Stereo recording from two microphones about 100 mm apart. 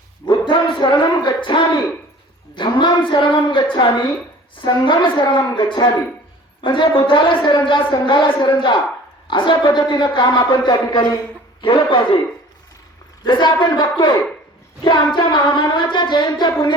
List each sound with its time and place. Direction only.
0.3 s speech: 50° left (ahead or behind)
4.6 s singing: 50° left (ahead or behind)
6.6 s speech: 60° left (ahead or behind)
8.4 s singing: 50° left (ahead or behind)
11.6 s speech: 60° left (ahead or behind)
13.2 s singing: 50° left (ahead or behind)